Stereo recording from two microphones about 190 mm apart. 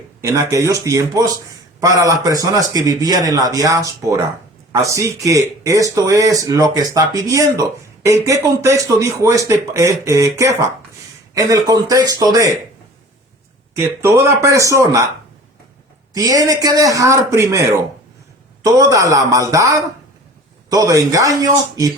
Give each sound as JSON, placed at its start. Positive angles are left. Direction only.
{"t": 0.2, "sound": "a man's voice", "side_deg": -15}
{"t": 13.7, "sound": "speech", "side_deg": -15}
{"t": 16.1, "sound": "a man's voice", "side_deg": -20}